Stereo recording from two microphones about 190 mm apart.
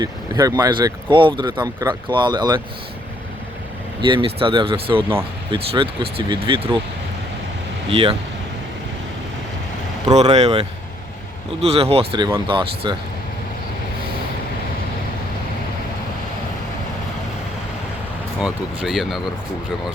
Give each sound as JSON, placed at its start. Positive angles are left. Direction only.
{"t": 0.0, "sound": "speech", "side_deg": -20}
{"t": 4.0, "sound": "speech", "side_deg": -25}
{"t": 7.9, "sound": "speech", "side_deg": -30}
{"t": 10.3, "sound": "speech", "side_deg": -35}
{"t": 18.3, "sound": "speech", "side_deg": -5}